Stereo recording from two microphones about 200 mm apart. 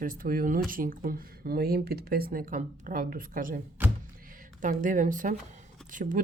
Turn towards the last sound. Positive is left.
turn(degrees=-40)  # may be behind; listen again after turning